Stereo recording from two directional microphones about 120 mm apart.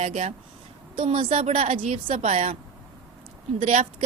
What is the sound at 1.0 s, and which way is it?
Speech, 50° right (ahead or behind).